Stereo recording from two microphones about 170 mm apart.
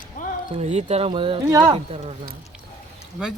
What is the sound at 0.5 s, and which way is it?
A man's voice, 40° right (ahead or behind).